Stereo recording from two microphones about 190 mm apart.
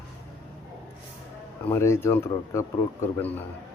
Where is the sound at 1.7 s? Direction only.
15° left (ahead or behind).